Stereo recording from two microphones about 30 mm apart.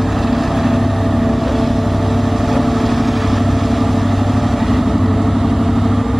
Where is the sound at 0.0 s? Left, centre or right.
Centre.